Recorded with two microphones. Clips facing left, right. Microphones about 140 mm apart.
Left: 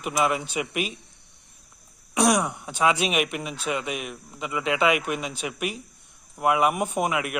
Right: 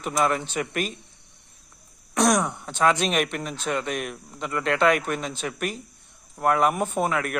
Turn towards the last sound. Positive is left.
turn(degrees=10)  # may be behind; listen again after turning